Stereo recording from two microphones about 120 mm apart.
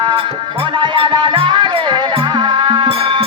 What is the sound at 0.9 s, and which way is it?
Music, 45° right (ahead or behind).